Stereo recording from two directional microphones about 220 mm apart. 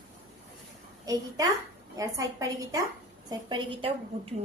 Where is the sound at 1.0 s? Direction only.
15° right (ahead or behind).